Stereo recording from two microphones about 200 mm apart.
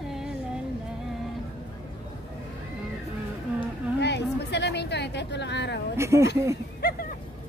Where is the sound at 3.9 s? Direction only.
60° left (ahead or behind).